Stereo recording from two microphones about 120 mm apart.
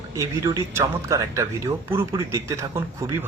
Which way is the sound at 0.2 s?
30° right (ahead or behind).